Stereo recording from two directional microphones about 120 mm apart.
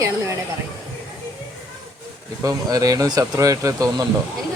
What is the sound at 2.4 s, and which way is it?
Speech, 30° right (ahead or behind).